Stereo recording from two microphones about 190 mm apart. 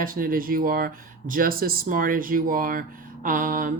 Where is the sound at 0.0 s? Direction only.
50° right (ahead or behind).